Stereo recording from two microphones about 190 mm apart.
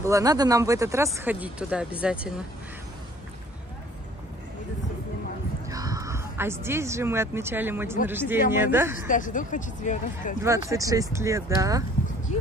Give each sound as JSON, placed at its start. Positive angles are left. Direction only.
{"t": 0.0, "sound": "speech", "side_deg": -15}
{"t": 5.7, "sound": "speech", "side_deg": -20}
{"t": 8.9, "sound": "speech", "side_deg": 45}
{"t": 10.4, "sound": "speech", "side_deg": -15}